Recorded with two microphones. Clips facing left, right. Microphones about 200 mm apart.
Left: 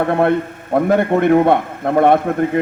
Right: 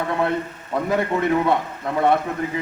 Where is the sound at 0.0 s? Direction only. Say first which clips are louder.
Left 7 dB; 55° left (ahead or behind).